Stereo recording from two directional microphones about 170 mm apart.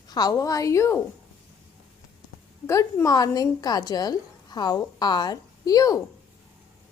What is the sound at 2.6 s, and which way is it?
A woman's voice, 20° left (ahead or behind).